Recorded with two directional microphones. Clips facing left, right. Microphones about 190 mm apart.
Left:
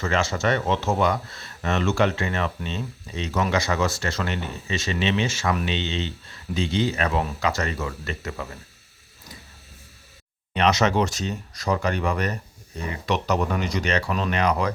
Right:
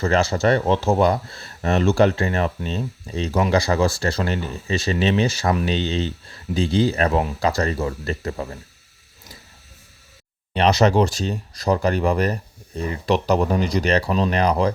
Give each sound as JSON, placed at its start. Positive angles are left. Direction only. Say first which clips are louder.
{"t": 0.0, "sound": "speech", "louder": "right 5 dB", "side_deg": -35}
{"t": 10.5, "sound": "speech", "louder": "right 4 dB", "side_deg": -35}